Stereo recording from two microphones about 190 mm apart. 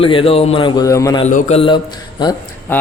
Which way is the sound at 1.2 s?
40° left (ahead or behind).